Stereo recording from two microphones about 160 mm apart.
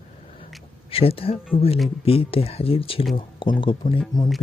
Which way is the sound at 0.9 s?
35° left (ahead or behind).